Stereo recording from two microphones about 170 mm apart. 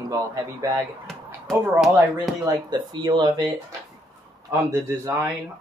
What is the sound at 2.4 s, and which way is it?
Speech, 25° right (ahead or behind).